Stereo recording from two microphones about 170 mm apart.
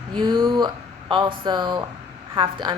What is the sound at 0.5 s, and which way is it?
A woman's voice, 25° right (ahead or behind).